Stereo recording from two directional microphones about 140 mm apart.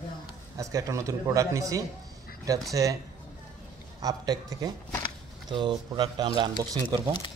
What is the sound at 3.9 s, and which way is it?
A man's voice, 25° right (ahead or behind).